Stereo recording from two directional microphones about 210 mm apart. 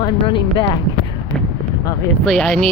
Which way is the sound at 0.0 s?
20° left (ahead or behind).